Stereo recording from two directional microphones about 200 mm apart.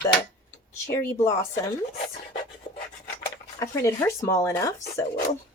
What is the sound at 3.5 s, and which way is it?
Speech, 15° left (ahead or behind).